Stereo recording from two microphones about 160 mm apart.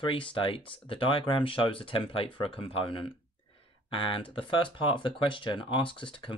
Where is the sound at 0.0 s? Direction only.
35° left (ahead or behind).